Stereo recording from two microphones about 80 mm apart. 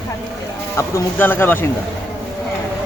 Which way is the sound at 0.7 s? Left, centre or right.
Left.